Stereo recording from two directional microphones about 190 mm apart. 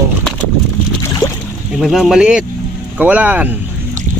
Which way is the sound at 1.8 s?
Centre (ahead or behind).